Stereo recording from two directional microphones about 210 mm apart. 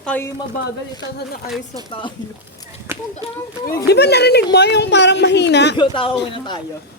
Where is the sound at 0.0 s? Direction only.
5° left (ahead or behind).